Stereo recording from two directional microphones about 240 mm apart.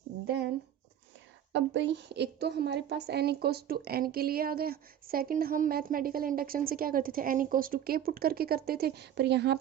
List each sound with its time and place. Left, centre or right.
0.3 s speech: right
1.5 s a woman's voice: right